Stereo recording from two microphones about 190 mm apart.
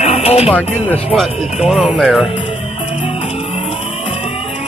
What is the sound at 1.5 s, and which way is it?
Speech, centre (ahead or behind).